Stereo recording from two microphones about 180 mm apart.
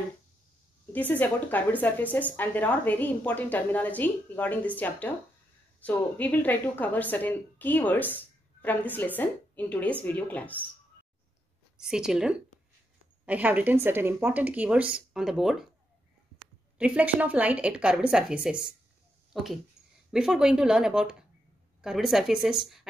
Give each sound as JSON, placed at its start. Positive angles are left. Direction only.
{"t": 0.9, "sound": "speech", "side_deg": 10}
{"t": 11.8, "sound": "speech", "side_deg": -5}
{"t": 16.7, "sound": "speech", "side_deg": -5}